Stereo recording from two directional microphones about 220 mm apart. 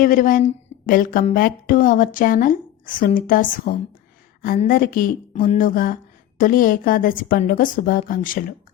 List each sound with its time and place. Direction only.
0.0 s speech: 40° left (ahead or behind)